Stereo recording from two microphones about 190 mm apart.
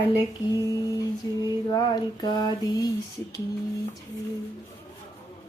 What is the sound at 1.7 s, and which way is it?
A woman's voice, 20° left (ahead or behind).